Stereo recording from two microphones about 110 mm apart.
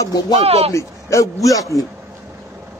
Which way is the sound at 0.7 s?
30° left (ahead or behind).